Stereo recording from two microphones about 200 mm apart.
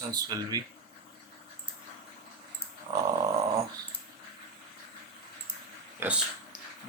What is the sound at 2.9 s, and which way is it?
Dog, 20° right (ahead or behind).